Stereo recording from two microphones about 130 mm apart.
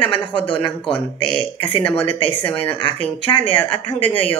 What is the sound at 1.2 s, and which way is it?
Speech, 40° left (ahead or behind).